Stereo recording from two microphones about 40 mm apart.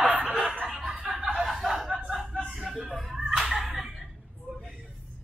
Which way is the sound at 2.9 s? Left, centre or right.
Centre.